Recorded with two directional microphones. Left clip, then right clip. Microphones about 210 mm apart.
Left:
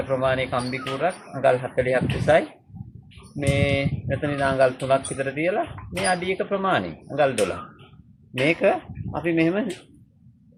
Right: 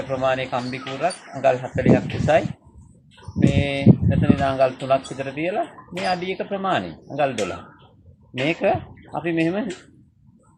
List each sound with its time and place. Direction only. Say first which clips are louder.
0.2 s speech: right 1 dB; 10° left (ahead or behind)
3.5 s speech: even; 15° left (ahead or behind)
8.4 s speech: even; 10° left (ahead or behind)